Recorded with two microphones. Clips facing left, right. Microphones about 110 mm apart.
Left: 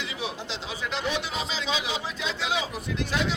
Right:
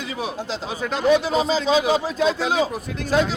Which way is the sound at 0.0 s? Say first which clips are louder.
Right 6 dB; 45° right (ahead or behind).